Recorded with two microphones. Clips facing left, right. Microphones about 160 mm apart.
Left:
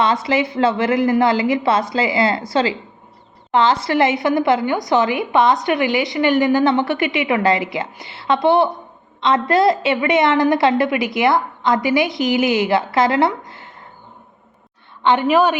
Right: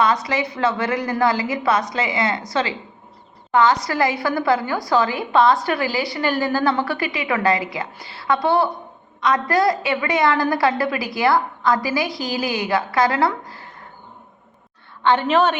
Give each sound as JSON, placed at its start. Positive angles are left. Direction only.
{"t": 0.0, "sound": "a woman's voice", "side_deg": 25}
{"t": 15.0, "sound": "a woman's voice", "side_deg": 15}